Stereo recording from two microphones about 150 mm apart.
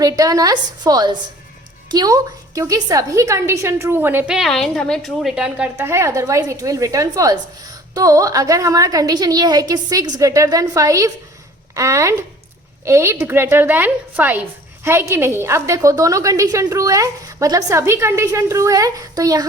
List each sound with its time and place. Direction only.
0.0 s a woman's voice: 25° right (ahead or behind)
4.4 s a woman's voice: centre (ahead or behind); by 19.5 s 25° right (ahead or behind)